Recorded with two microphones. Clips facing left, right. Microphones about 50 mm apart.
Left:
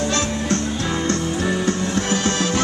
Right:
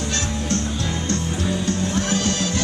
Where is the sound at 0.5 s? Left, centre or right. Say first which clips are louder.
Left 3 dB; left.